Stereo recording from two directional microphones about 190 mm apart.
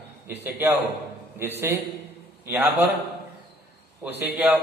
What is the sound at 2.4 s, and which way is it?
Speech, 10° right (ahead or behind).